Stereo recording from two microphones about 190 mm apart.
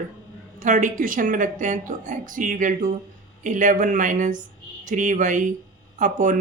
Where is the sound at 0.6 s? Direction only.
40° right (ahead or behind).